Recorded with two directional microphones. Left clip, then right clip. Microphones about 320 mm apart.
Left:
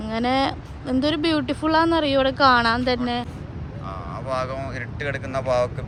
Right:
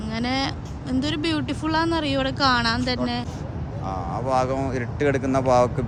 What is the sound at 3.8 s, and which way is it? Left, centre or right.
Speech, right.